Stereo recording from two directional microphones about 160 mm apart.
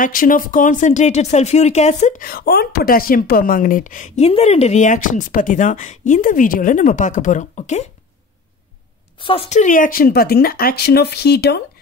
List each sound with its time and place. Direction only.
0.0 s speech: 60° left (ahead or behind)
4.3 s speech: 40° left (ahead or behind)
9.2 s speech: 35° left (ahead or behind); by 11.6 s 90° left